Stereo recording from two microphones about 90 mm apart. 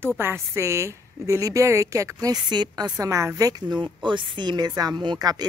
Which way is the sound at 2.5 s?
55° right (ahead or behind).